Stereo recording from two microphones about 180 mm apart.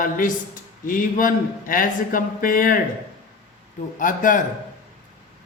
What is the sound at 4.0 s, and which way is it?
Speech, 45° left (ahead or behind).